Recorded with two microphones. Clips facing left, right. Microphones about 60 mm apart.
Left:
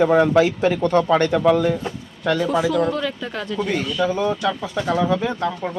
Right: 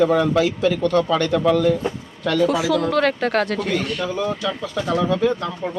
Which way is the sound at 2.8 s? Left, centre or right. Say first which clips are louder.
Right 5 dB; right.